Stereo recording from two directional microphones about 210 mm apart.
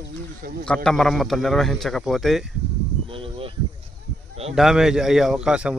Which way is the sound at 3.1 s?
25° right (ahead or behind).